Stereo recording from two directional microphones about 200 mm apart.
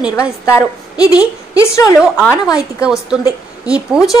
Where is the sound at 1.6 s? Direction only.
15° left (ahead or behind).